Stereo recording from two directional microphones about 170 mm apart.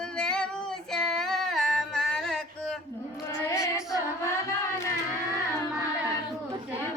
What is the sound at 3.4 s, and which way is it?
Female singing, 15° left (ahead or behind).